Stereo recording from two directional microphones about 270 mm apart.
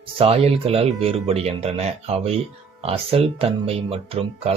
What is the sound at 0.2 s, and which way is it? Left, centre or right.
Speech, right.